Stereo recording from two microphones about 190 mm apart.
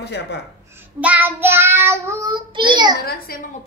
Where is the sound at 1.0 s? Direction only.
10° right (ahead or behind); by 2.9 s 25° right (ahead or behind).